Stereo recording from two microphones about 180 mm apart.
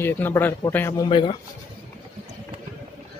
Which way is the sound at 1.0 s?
30° left (ahead or behind).